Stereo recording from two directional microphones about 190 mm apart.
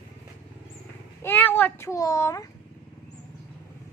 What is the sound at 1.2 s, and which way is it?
A child's voice, 10° left (ahead or behind).